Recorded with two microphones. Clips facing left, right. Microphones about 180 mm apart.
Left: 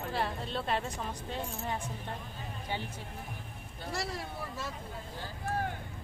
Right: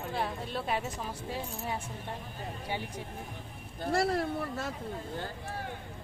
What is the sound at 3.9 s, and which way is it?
Speech, 55° right (ahead or behind).